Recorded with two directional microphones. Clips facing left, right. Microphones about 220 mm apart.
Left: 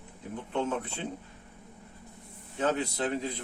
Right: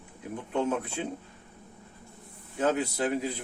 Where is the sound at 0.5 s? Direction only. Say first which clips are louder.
Right 3 dB; 10° right (ahead or behind).